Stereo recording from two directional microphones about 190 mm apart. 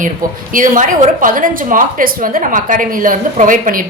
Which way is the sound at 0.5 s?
45° right (ahead or behind).